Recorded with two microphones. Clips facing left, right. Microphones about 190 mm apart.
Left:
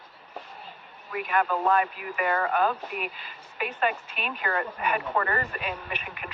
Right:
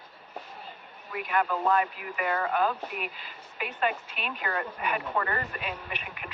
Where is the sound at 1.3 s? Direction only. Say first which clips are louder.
Left 2 dB; 55° left (ahead or behind).